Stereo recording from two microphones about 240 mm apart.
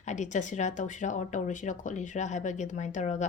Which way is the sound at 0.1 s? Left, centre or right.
Left.